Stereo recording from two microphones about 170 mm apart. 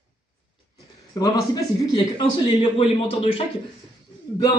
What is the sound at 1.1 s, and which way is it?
A man's voice, 25° left (ahead or behind).